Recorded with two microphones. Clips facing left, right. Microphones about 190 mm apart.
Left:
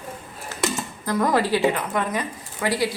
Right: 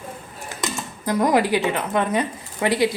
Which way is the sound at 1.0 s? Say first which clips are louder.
Right 2 dB; 15° right (ahead or behind).